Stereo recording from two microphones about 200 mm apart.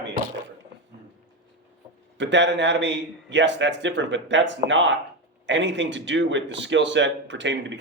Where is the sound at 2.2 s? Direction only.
65° right (ahead or behind).